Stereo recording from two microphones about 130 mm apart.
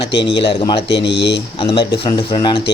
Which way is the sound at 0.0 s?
40° left (ahead or behind).